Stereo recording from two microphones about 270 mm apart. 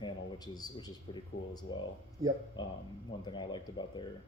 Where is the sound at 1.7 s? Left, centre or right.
Centre.